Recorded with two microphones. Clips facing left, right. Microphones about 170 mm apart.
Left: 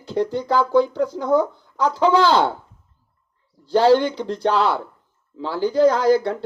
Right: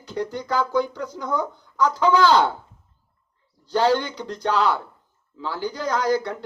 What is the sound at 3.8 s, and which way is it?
Speech, 30° left (ahead or behind).